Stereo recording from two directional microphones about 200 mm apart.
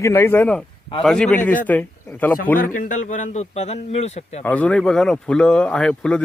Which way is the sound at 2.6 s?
45° left (ahead or behind).